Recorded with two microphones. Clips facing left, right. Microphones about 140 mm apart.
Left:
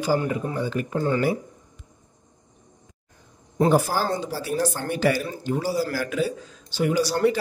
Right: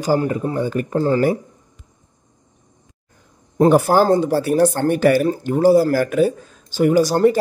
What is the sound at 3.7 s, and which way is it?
Speech, 60° right (ahead or behind).